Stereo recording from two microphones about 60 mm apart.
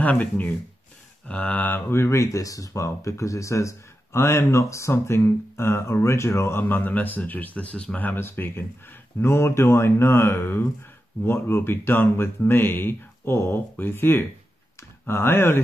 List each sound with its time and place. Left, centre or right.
0.0 s speech: left
1.9 s speech: left
6.7 s speech: left
8.2 s speech: left
9.2 s speech: left